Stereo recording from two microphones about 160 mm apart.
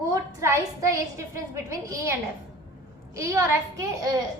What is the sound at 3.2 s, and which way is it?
A woman's voice, 15° right (ahead or behind).